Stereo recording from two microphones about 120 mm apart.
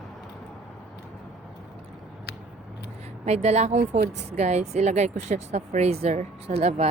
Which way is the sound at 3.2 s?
65° right (ahead or behind).